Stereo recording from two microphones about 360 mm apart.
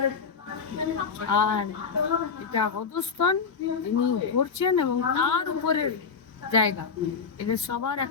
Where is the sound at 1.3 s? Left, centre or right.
Left.